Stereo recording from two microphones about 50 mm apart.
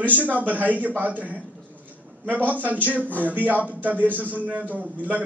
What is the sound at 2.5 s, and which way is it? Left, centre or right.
A man's voice, right.